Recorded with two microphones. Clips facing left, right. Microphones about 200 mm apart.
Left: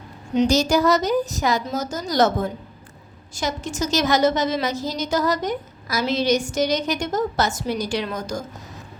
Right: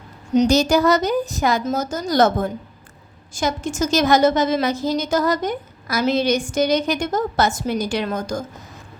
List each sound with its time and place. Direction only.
0.3 s a woman's voice: 55° right (ahead or behind)
3.3 s a woman's voice: 50° right (ahead or behind)